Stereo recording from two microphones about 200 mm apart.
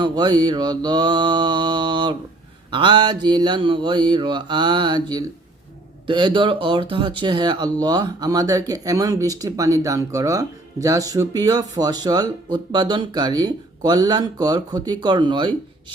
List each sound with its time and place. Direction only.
0.0 s speech: 20° right (ahead or behind)